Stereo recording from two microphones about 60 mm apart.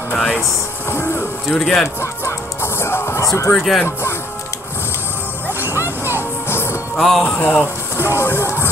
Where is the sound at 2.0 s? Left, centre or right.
Left.